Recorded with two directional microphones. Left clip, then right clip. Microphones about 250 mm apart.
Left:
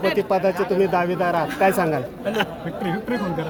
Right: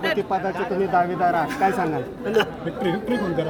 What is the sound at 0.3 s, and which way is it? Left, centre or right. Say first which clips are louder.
Speech: left 4 dB; left.